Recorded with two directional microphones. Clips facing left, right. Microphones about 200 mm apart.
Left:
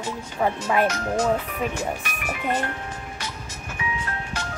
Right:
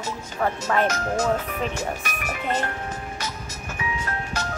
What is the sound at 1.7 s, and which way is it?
Speech, 40° right (ahead or behind).